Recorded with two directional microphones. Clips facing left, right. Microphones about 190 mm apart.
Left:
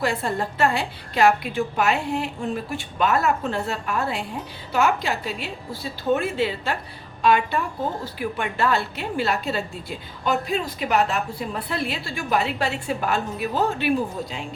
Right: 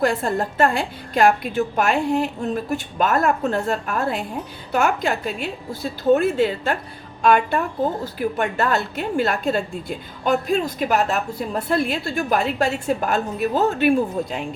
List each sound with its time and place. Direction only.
0.0 s a woman's voice: 45° right (ahead or behind)